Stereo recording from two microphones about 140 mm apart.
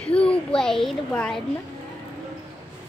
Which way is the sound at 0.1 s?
10° left (ahead or behind).